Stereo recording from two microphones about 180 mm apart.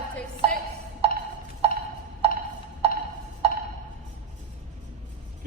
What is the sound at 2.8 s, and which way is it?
Music, 35° right (ahead or behind).